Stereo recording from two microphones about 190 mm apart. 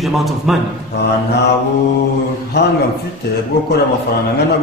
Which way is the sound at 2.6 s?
65° left (ahead or behind).